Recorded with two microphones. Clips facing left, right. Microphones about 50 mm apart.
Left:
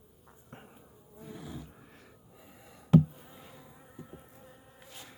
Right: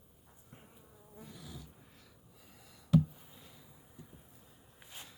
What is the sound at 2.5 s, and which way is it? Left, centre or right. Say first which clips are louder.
Insect: left 5 dB; left.